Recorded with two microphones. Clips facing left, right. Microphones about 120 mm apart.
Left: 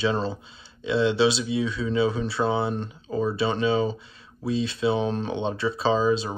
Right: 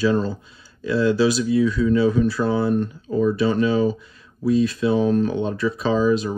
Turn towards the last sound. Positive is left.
turn(degrees=30)  # may be behind; listen again after turning